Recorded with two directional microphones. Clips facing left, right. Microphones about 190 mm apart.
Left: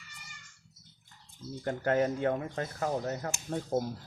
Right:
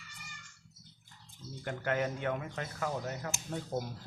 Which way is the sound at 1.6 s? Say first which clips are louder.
Left 5 dB; 35° left (ahead or behind).